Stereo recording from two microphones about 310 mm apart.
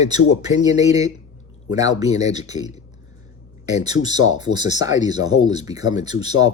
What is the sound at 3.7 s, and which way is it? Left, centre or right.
A man's voice, centre.